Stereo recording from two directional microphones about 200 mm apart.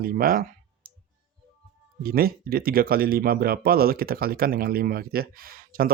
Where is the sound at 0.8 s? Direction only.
45° right (ahead or behind).